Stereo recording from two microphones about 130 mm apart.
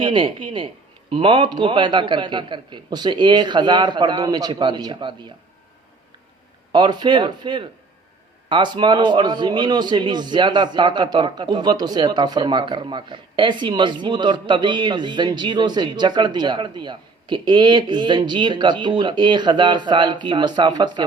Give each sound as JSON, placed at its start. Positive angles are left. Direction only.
{"t": 0.0, "sound": "a man's voice", "side_deg": -40}
{"t": 6.7, "sound": "a man's voice", "side_deg": -35}